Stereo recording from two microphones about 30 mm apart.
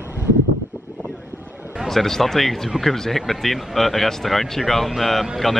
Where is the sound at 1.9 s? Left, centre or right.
Centre.